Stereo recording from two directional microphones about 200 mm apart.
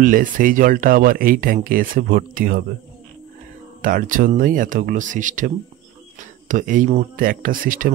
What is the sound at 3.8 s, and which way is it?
Speech, 45° right (ahead or behind).